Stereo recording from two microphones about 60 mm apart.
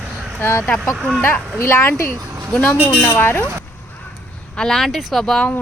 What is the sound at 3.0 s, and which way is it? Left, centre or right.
Speech, left.